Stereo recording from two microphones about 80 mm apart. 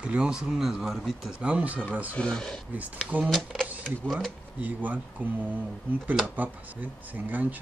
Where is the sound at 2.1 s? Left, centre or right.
Centre.